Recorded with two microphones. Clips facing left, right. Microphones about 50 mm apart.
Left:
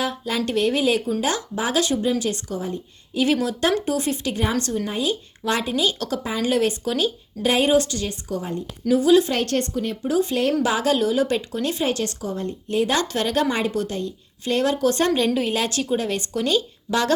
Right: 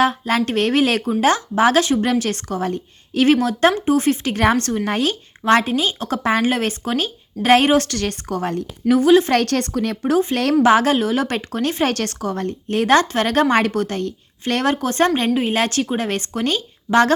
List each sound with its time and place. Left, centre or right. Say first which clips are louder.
0.0 s speech: right 7 dB; right
3.2 s a woman's voice: right 6 dB; right
4.9 s a woman's voice: right 5 dB; right
5.4 s a woman's voice: right 7 dB; right
6.1 s speech: right 7 dB; right
6.4 s a woman's voice: right 1 dB; right
7.5 s a woman's voice: right 5 dB; right
8.9 s a woman's voice: right 3 dB; right
9.3 s a woman's voice: right 5 dB; right
10.6 s a woman's voice: right 6 dB; right
12.6 s a woman's voice: right 6 dB; right